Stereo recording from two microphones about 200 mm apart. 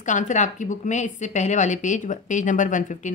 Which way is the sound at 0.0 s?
40° left (ahead or behind).